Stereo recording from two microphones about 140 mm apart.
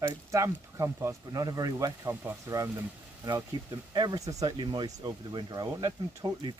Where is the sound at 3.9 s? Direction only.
30° right (ahead or behind).